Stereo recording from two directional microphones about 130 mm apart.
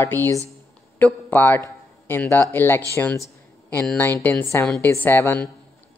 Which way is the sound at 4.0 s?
15° left (ahead or behind).